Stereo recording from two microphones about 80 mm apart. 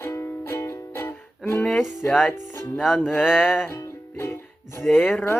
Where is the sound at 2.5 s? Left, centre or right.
Left.